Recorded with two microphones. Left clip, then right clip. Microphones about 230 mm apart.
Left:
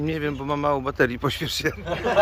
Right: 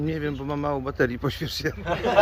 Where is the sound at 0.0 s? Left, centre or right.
Centre.